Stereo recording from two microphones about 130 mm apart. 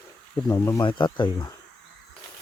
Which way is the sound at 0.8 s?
35° left (ahead or behind).